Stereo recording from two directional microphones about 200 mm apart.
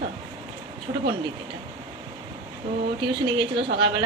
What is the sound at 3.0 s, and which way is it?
Speech, 25° right (ahead or behind).